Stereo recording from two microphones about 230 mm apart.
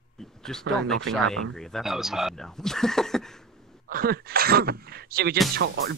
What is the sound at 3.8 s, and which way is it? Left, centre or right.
Speech, right.